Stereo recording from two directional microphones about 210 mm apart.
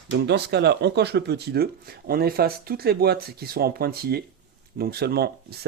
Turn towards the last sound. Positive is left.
turn(degrees=-50)  # may be behind; listen again after turning